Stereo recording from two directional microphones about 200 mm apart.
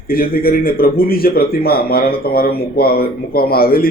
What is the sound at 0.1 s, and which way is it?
Speech, 45° left (ahead or behind).